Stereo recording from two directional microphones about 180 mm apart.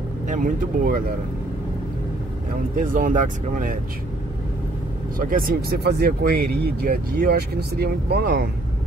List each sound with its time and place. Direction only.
0.3 s speech: 50° right (ahead or behind)
2.8 s speech: 45° right (ahead or behind)
5.2 s speech: 50° right (ahead or behind)